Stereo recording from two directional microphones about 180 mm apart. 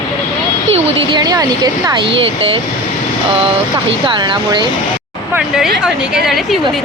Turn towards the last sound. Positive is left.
turn(degrees=0)  # may be behind; listen again after turning